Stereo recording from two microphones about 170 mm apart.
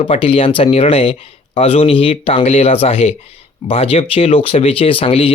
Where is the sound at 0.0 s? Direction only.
35° left (ahead or behind).